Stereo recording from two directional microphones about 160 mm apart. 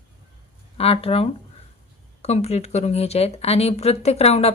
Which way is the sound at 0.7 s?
40° left (ahead or behind).